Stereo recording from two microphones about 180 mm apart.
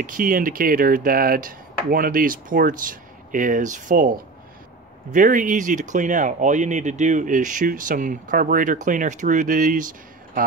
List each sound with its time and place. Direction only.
0.0 s speech: 50° right (ahead or behind)